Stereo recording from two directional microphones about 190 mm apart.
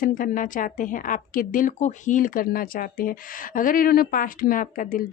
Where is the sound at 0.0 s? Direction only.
45° left (ahead or behind).